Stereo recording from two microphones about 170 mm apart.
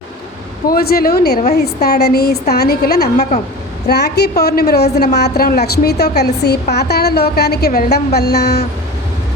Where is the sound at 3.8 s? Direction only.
75° left (ahead or behind).